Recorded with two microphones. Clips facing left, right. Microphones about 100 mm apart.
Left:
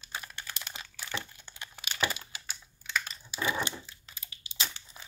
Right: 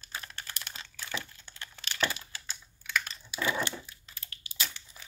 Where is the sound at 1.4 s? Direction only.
15° left (ahead or behind).